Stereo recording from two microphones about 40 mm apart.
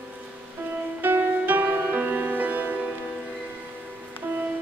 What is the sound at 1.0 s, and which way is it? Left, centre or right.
Music, right.